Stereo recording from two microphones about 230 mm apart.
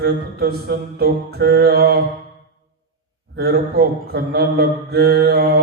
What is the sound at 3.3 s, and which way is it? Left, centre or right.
A man's voice, right.